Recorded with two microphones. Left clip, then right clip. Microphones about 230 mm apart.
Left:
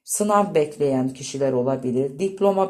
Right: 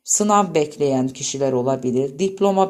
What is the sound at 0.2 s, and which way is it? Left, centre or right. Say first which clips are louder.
Speech: right 1 dB; right.